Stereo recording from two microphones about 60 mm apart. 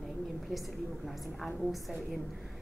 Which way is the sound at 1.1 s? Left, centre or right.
Centre.